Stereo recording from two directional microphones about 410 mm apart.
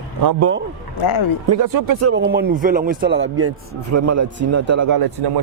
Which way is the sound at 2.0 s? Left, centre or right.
Right.